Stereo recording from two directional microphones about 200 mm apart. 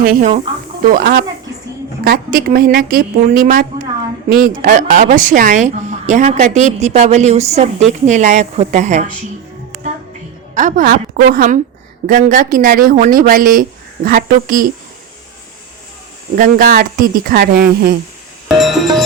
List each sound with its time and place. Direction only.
0.0 s speech: 45° right (ahead or behind)
10.5 s speech: 40° right (ahead or behind)
16.3 s speech: 45° right (ahead or behind)
18.4 s music: centre (ahead or behind)